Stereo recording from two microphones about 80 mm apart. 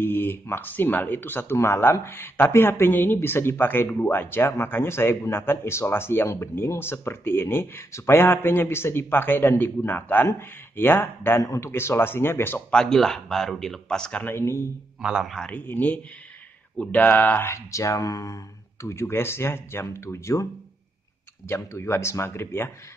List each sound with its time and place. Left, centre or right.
0.0 s speech: left
12.7 s speech: centre
14.2 s speech: left
15.0 s a man's voice: centre
15.2 s a man's voice: centre
15.5 s speech: left
17.5 s speech: left
21.5 s speech: left